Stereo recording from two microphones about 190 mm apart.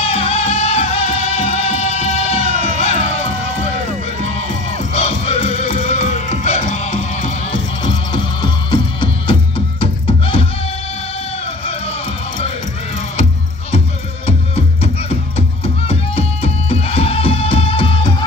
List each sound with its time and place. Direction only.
0.0 s music: 30° left (ahead or behind)
4.9 s music: 35° left (ahead or behind)
7.8 s music: 25° left (ahead or behind)
15.9 s music: 30° left (ahead or behind)